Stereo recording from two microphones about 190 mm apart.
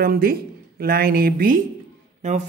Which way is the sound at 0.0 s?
50° right (ahead or behind).